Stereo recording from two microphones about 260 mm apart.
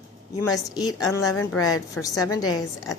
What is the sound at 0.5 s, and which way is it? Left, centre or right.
Speech, centre.